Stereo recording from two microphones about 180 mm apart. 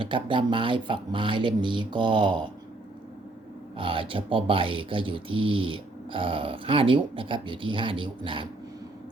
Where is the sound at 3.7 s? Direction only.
30° right (ahead or behind).